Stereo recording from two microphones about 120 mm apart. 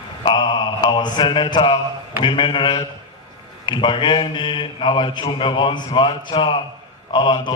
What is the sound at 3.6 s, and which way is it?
A man's voice, 40° left (ahead or behind).